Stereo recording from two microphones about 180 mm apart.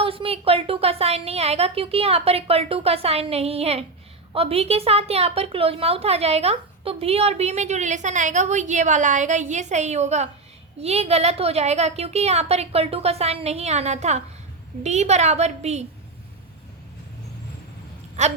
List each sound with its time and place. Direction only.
0.0 s a woman's voice: 30° right (ahead or behind)
18.2 s a woman's voice: 40° right (ahead or behind)